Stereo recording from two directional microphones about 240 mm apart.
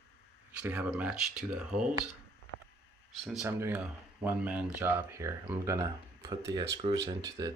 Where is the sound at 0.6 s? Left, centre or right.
Centre.